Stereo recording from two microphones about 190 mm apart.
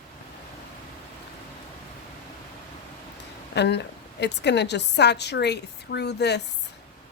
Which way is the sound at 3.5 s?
65° left (ahead or behind).